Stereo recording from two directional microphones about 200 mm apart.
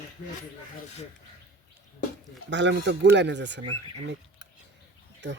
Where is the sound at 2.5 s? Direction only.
60° right (ahead or behind).